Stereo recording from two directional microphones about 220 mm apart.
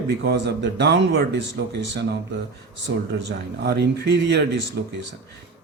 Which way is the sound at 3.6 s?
50° right (ahead or behind).